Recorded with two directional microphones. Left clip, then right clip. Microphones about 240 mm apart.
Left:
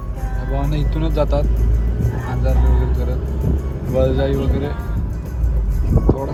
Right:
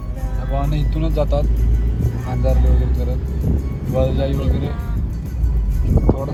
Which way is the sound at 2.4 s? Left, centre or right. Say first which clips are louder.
Right 3 dB; centre.